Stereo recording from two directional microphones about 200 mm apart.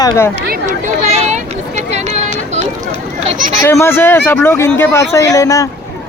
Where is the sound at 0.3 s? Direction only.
50° right (ahead or behind).